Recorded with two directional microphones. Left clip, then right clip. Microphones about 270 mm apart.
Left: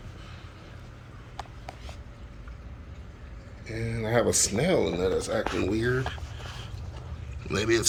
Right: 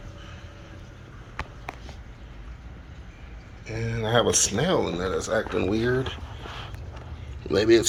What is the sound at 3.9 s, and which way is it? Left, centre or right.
Speech, right.